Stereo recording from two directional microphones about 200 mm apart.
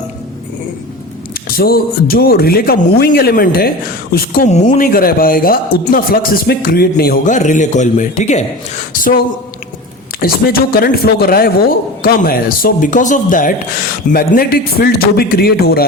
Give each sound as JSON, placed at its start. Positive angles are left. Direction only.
{"t": 1.3, "sound": "speech", "side_deg": 50}
{"t": 4.4, "sound": "speech", "side_deg": 35}